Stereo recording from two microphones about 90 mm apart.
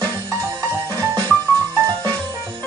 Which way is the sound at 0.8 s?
30° right (ahead or behind).